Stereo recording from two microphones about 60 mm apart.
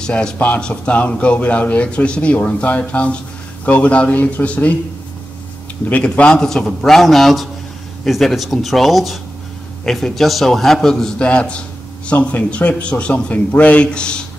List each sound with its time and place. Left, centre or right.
0.0 s a man's voice: centre
6.0 s a man's voice: centre